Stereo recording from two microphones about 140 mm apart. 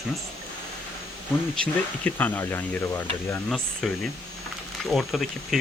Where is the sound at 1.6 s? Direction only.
10° left (ahead or behind).